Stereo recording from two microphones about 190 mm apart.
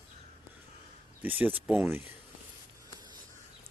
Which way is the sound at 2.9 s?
20° right (ahead or behind).